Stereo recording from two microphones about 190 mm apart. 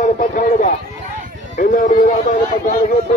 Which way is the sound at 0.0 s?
40° left (ahead or behind).